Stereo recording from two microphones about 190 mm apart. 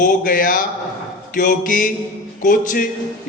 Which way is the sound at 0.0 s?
45° left (ahead or behind).